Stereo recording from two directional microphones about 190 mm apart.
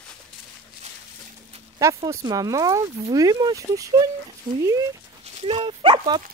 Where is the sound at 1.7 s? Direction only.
15° right (ahead or behind).